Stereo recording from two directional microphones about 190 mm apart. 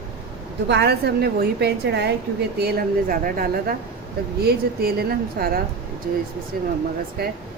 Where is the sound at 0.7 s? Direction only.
60° right (ahead or behind).